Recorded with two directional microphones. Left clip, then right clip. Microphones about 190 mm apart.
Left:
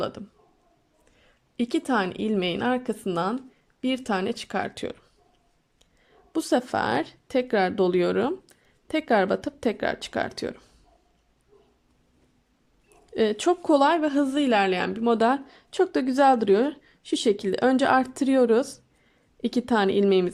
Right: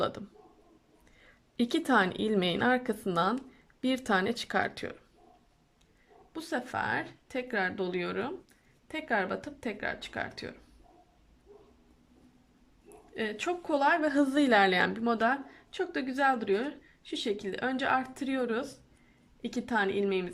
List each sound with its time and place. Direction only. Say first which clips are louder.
0.0 s a man's voice: left 2 dB; 10° left (ahead or behind)
6.3 s a woman's voice: left 10 dB; 30° left (ahead or behind)
13.1 s a woman's voice: left 10 dB; 25° left (ahead or behind)